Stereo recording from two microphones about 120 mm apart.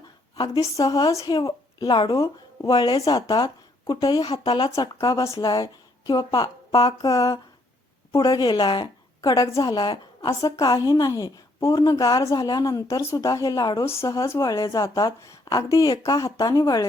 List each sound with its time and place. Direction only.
0.4 s a woman's voice: 30° left (ahead or behind)